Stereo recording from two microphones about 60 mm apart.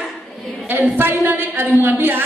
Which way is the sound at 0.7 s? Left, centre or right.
Right.